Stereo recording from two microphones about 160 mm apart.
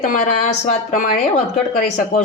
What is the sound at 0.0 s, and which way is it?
A woman's voice, 55° left (ahead or behind).